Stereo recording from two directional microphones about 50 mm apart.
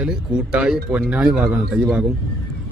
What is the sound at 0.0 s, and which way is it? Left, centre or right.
Speech, centre.